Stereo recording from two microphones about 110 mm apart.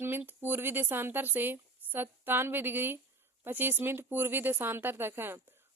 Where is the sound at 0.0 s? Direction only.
20° right (ahead or behind).